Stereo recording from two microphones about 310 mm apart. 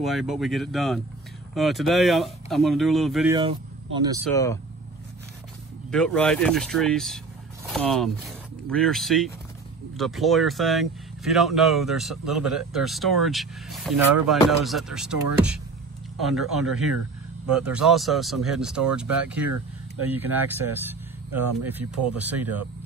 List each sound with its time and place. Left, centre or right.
0.0 s speech: centre
3.3 s speech: centre
4.3 s speech: centre
5.9 s speech: centre
21.6 s speech: centre